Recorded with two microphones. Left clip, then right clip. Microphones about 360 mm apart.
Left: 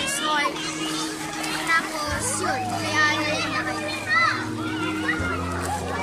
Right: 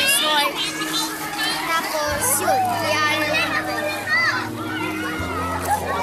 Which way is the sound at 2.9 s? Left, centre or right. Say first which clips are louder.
Left 3 dB; centre.